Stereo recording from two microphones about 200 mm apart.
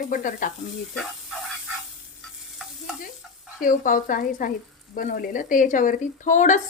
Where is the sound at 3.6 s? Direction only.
40° left (ahead or behind).